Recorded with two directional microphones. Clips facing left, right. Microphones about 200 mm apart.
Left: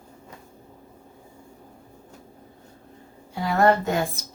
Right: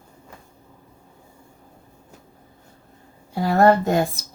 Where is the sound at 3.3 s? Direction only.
40° right (ahead or behind).